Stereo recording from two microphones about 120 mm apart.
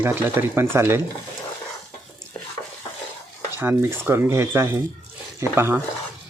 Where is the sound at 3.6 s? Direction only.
15° right (ahead or behind).